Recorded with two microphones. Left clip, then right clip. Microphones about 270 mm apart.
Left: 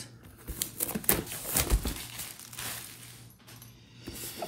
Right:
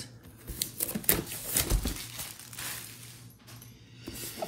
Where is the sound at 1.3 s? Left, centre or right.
Left.